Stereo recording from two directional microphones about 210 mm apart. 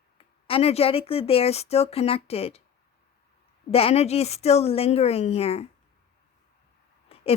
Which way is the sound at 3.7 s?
30° left (ahead or behind).